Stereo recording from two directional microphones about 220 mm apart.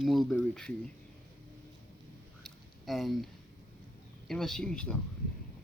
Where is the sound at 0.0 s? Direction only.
Centre (ahead or behind).